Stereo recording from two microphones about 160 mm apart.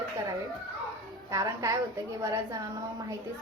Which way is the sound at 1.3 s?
20° right (ahead or behind).